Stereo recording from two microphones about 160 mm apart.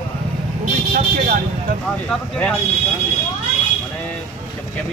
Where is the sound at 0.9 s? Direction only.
60° right (ahead or behind).